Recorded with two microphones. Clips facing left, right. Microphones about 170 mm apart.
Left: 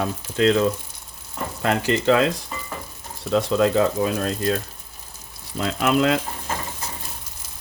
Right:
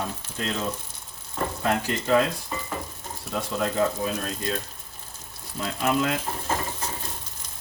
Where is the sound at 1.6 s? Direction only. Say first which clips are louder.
Left 7 dB; 80° left.